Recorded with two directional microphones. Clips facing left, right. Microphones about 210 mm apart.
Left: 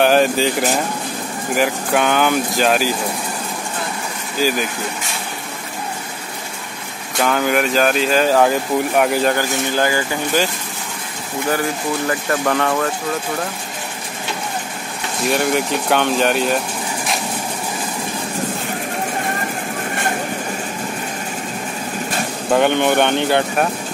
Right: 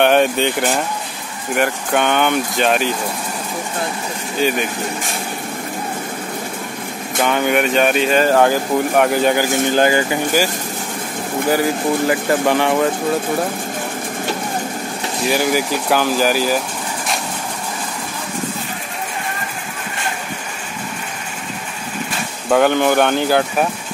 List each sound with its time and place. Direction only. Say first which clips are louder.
0.0 s speech: even; centre (ahead or behind)
4.4 s speech: right 1 dB; centre (ahead or behind)
7.2 s speech: right 1 dB; centre (ahead or behind)
9.4 s speech: right 4 dB; 20° right (ahead or behind)
12.1 s speech: right 3 dB; 15° right (ahead or behind)
15.2 s speech: even; centre (ahead or behind)
22.5 s speech: right 1 dB; centre (ahead or behind)